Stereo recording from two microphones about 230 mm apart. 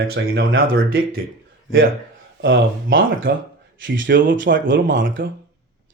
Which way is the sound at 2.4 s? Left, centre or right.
Right.